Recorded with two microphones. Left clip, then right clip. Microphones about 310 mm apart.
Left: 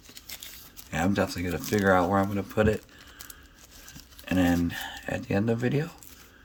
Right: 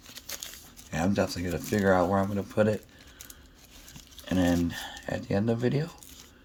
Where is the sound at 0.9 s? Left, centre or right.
Centre.